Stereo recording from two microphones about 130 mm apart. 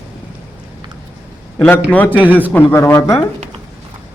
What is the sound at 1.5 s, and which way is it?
Speech, 15° left (ahead or behind).